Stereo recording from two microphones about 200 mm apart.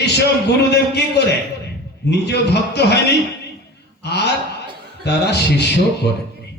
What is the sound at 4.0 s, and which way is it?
A man's voice, 55° left (ahead or behind).